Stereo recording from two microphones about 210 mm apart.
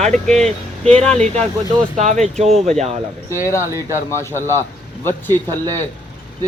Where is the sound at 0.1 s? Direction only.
5° left (ahead or behind).